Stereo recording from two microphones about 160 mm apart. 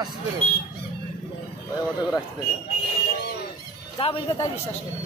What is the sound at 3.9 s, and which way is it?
Speech, 35° left (ahead or behind).